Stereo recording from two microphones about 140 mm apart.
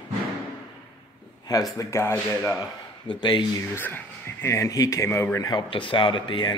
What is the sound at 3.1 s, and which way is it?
Speech, 35° left (ahead or behind).